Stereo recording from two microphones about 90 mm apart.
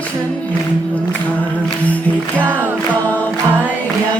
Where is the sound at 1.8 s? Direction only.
15° left (ahead or behind).